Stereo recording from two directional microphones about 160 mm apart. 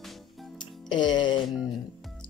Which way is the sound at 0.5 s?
30° left (ahead or behind).